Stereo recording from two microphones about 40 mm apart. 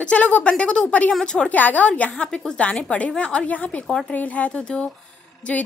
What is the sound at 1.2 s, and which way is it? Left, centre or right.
Speech, left.